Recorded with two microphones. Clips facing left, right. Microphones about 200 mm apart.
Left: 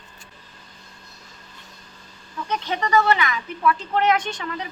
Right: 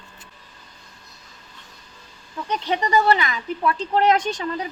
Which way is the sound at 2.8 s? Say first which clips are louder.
Even; 35° right (ahead or behind).